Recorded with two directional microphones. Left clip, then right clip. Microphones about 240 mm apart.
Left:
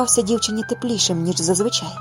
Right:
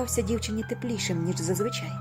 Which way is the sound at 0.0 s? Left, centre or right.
Left.